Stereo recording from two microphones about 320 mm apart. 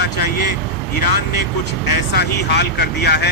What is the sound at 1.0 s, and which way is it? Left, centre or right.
Speech, left.